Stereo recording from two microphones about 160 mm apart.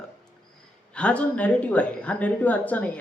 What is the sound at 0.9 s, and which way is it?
A woman's voice, 10° left (ahead or behind).